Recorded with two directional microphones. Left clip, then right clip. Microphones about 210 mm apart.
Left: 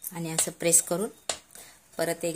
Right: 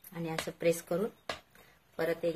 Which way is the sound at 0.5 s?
40° left (ahead or behind).